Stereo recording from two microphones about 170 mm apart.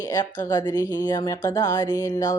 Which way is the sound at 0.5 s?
25° left (ahead or behind).